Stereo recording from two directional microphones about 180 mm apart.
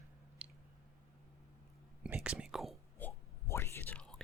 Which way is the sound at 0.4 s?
5° right (ahead or behind).